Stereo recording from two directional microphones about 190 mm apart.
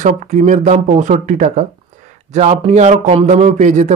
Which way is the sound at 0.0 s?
40° right (ahead or behind).